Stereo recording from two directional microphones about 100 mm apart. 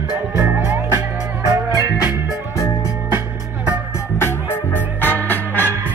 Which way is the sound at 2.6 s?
30° left (ahead or behind).